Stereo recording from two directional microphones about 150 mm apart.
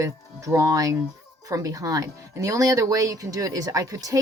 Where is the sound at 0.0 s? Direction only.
20° right (ahead or behind).